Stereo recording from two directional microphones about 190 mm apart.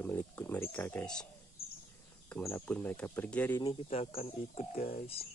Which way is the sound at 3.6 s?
30° left (ahead or behind).